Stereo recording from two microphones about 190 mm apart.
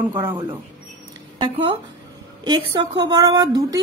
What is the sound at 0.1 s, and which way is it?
Speech, 10° right (ahead or behind).